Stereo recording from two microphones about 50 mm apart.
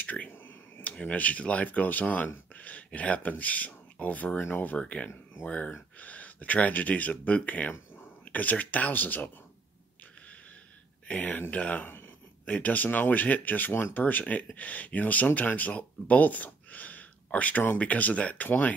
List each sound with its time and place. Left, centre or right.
0.0 s a sound: left
0.3 s a sound: left
0.8 s speech: left
4.4 s speech: left
4.7 s speech: left
5.1 s speech: left
5.9 s speech: left
11.1 s speech: left
11.8 s a sound: left
12.4 s speech: left